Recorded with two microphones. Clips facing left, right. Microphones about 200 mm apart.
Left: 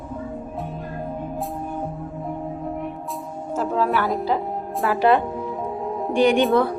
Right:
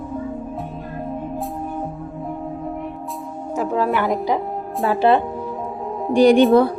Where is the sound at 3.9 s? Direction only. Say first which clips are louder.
Right 2 dB; 15° right (ahead or behind).